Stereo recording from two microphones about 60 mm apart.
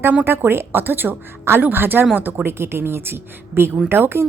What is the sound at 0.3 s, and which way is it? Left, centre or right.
A woman's voice, right.